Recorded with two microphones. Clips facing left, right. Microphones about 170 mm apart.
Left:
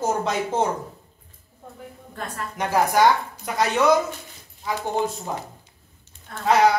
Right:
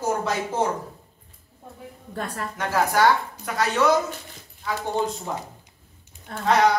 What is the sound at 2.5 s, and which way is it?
A woman's voice, 15° left (ahead or behind).